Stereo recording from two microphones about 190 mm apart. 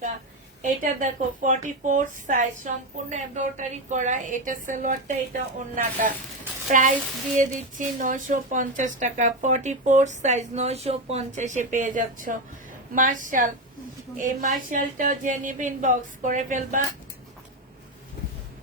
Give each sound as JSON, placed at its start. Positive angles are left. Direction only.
{"t": 0.6, "sound": "a woman's voice", "side_deg": -40}